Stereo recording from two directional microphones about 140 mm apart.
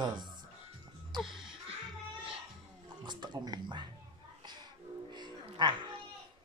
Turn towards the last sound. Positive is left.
turn(degrees=-30)  # may be behind; listen again after turning